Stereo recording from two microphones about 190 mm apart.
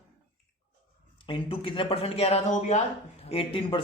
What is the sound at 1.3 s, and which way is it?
Speech, 25° left (ahead or behind).